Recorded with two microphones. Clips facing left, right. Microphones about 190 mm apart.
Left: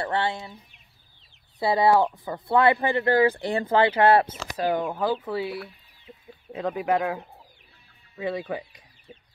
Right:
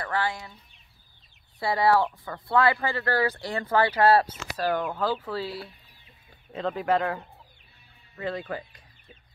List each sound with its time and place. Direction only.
0.0 s speech: 25° left (ahead or behind)
1.6 s speech: 20° left (ahead or behind)
6.5 s speech: 10° left (ahead or behind)